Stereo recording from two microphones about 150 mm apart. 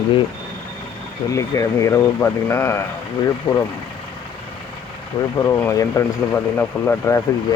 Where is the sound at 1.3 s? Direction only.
20° left (ahead or behind).